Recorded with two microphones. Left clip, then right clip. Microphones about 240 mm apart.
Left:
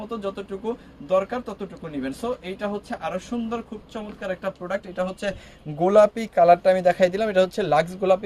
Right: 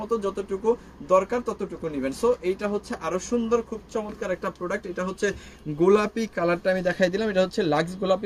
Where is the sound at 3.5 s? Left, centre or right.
Centre.